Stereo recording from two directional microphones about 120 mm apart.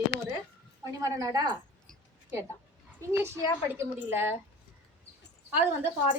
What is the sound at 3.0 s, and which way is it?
Speech, 25° right (ahead or behind).